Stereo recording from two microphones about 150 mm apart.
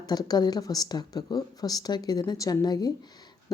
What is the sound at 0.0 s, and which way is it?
A woman's voice, 25° left (ahead or behind).